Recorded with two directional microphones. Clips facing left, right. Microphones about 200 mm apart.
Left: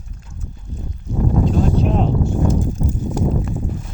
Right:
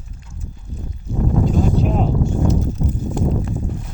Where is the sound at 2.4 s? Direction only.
50° left (ahead or behind).